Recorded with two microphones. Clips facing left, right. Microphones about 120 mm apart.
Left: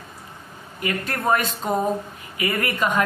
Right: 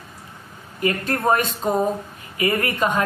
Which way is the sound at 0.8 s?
30° right (ahead or behind).